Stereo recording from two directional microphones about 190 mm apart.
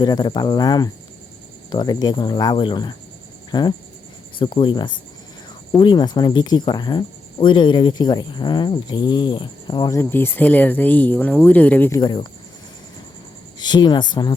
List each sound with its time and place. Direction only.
0.0 s speech: 25° left (ahead or behind)
11.9 s speech: 25° left (ahead or behind)
13.6 s speech: 20° left (ahead or behind)